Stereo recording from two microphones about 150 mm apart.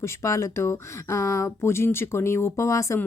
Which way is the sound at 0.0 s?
20° left (ahead or behind).